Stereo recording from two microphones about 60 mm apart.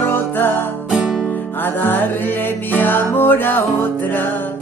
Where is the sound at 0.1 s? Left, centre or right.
Left.